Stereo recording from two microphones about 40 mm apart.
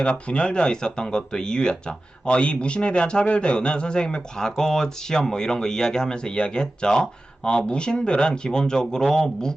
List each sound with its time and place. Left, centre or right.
0.0 s speech: left